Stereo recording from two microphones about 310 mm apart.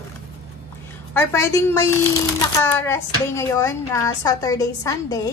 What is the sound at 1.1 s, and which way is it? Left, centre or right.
A child's voice, centre.